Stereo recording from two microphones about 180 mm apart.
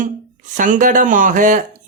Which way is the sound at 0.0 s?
45° right (ahead or behind).